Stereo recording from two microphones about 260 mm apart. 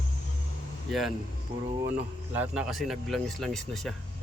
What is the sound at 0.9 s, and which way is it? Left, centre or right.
Speech, centre.